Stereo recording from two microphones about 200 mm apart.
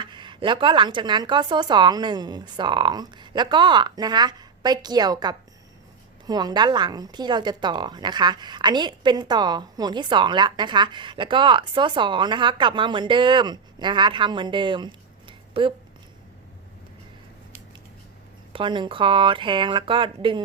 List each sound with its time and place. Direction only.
0.0 s a woman's voice: 25° right (ahead or behind)
15.3 s a sound: 25° right (ahead or behind)
18.5 s a woman's voice: 25° right (ahead or behind)